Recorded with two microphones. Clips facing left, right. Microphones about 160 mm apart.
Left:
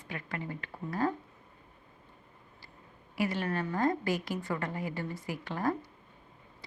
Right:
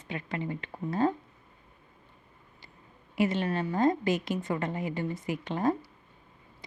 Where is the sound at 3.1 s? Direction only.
20° right (ahead or behind).